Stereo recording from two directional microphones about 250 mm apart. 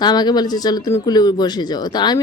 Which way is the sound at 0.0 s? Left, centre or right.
Centre.